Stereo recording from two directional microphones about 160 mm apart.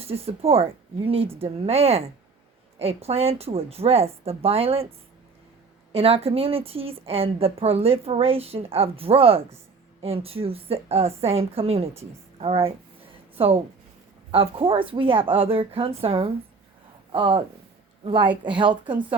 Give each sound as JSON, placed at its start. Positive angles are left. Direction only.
{"t": 0.0, "sound": "a woman's voice", "side_deg": -40}